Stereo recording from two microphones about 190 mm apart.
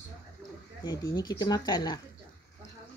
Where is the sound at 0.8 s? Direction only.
20° left (ahead or behind).